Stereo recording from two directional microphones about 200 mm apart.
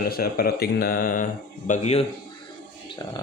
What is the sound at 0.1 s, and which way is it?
Speech, 50° left (ahead or behind).